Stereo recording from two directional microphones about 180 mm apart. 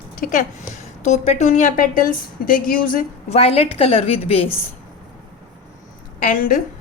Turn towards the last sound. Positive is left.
turn(degrees=50)  # may be behind; listen again after turning